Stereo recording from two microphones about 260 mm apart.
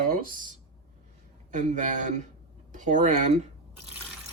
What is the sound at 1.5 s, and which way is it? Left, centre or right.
Speech, right.